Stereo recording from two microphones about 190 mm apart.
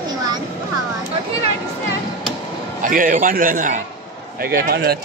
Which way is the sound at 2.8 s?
45° right (ahead or behind).